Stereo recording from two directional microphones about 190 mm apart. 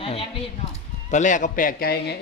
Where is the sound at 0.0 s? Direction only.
30° left (ahead or behind).